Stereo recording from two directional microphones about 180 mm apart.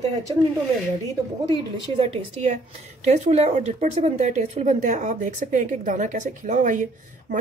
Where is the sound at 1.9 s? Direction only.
35° right (ahead or behind).